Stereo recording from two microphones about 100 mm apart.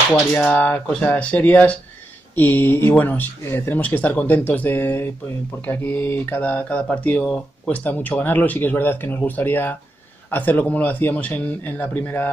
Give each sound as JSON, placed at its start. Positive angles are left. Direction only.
{"t": 0.4, "sound": "speech", "side_deg": 15}